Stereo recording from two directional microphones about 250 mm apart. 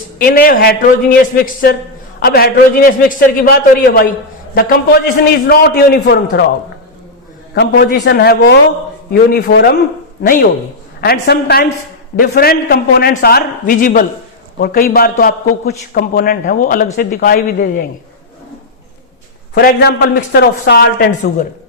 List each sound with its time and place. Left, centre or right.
0.2 s a man's voice: left
7.5 s a man's voice: left
11.0 s a man's voice: left
19.5 s a man's voice: left